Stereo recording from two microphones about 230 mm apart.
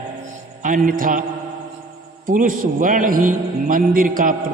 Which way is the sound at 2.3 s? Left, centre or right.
Right.